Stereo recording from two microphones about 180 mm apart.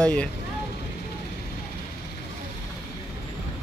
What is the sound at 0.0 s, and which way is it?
Speech, 5° left (ahead or behind).